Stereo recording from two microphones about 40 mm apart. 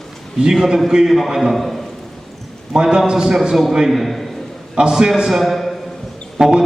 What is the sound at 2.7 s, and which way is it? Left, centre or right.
Speech, centre.